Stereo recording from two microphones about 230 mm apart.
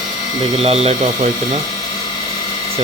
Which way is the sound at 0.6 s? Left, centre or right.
Right.